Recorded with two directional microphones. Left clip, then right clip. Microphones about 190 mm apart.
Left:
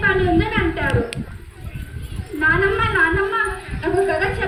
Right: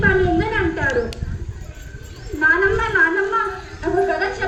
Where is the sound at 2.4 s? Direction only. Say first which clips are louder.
Right 1 dB; 20° left (ahead or behind).